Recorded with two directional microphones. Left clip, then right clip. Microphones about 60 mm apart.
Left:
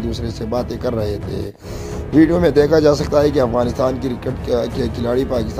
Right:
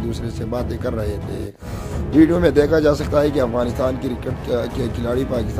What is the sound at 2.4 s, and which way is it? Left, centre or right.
Speech, left.